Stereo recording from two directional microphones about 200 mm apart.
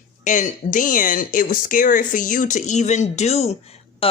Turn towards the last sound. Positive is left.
turn(degrees=25)  # may be behind; listen again after turning